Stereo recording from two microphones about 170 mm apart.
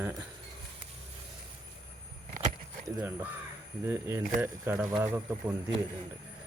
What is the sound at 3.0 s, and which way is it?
Speech, 10° right (ahead or behind).